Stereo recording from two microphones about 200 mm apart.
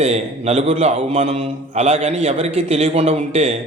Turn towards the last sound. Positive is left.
turn(degrees=-35)  # may be behind; listen again after turning